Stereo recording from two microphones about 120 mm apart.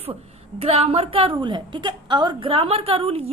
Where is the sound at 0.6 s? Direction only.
55° right (ahead or behind); by 2.5 s 40° right (ahead or behind).